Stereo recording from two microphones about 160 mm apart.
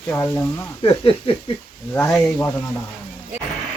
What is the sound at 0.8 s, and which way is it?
Speech, 35° left (ahead or behind).